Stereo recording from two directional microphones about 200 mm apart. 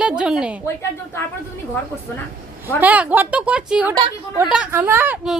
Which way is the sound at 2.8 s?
5° right (ahead or behind).